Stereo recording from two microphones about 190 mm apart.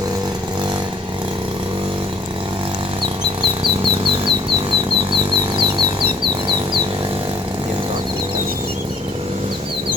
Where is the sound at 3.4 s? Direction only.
25° right (ahead or behind).